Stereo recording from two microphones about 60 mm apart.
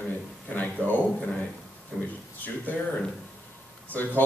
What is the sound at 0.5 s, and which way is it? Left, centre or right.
Speech, left.